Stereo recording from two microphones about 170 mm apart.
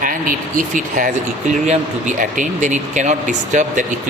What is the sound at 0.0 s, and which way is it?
Speech, 55° right (ahead or behind).